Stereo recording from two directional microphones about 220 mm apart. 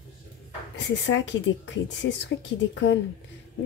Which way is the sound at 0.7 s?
55° left (ahead or behind).